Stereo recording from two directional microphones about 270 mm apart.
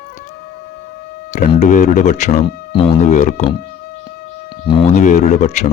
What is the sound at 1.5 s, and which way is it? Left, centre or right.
Speech, left.